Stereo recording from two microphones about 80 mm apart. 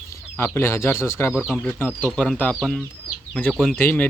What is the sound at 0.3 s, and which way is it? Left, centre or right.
Speech, left.